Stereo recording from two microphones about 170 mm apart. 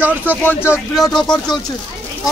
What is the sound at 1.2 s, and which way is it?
Speech, 25° left (ahead or behind).